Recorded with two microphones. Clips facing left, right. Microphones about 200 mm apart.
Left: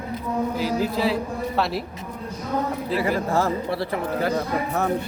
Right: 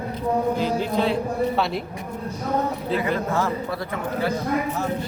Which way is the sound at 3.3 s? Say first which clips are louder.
Left 2 dB; 35° left (ahead or behind).